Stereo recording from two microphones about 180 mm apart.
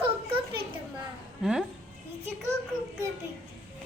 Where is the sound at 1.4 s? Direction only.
5° right (ahead or behind).